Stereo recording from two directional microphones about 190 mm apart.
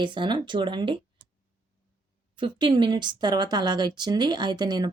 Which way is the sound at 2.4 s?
25° right (ahead or behind).